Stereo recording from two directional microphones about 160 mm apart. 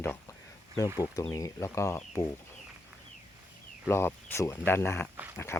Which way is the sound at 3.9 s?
15° left (ahead or behind).